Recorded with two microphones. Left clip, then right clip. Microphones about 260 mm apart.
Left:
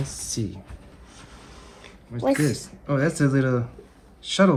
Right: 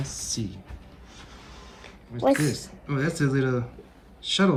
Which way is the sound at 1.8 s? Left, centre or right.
Right.